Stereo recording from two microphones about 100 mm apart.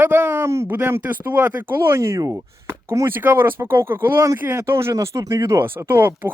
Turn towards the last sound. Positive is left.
turn(degrees=-20)  # may be behind; listen again after turning